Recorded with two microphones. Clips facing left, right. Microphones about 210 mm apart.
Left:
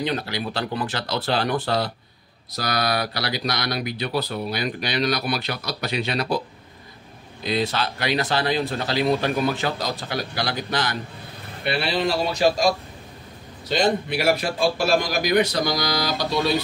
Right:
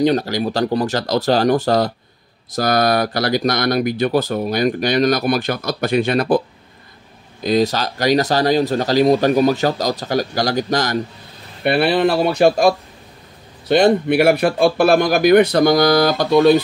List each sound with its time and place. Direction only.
0.0 s speech: 40° right (ahead or behind)
7.4 s speech: 40° right (ahead or behind)
11.6 s a man's voice: 55° right (ahead or behind)